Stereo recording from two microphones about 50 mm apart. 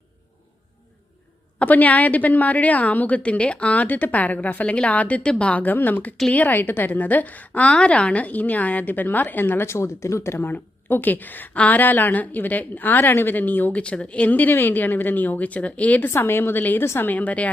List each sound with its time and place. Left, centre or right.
1.5 s a woman's voice: left
5.5 s a woman's voice: left
9.6 s speech: left
10.4 s a woman's voice: left
13.8 s a woman's voice: left
16.0 s a woman's voice: left
17.0 s a woman's voice: left